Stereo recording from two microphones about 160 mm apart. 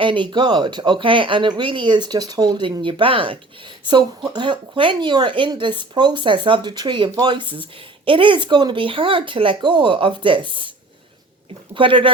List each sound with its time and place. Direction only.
0.0 s speech: 30° right (ahead or behind)
11.7 s speech: 30° right (ahead or behind)